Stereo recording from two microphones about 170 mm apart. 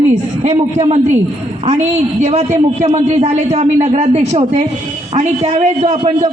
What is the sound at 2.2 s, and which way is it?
A man's voice, 40° right (ahead or behind).